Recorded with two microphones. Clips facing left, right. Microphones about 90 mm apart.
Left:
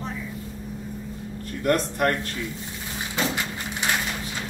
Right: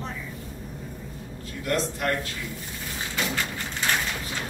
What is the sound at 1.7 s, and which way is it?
Speech, 50° left (ahead or behind).